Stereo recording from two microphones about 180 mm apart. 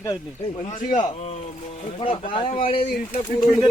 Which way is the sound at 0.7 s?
45° left (ahead or behind).